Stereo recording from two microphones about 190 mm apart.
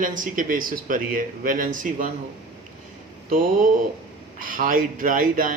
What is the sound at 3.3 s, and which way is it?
Speech, 45° right (ahead or behind).